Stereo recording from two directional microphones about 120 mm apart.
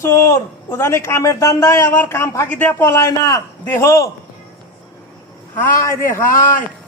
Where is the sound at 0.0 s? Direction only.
25° left (ahead or behind).